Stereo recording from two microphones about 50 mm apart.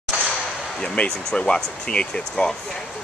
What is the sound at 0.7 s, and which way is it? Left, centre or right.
Speech, centre.